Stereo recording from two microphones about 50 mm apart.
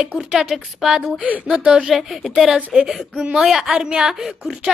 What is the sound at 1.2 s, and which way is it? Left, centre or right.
Speech, right.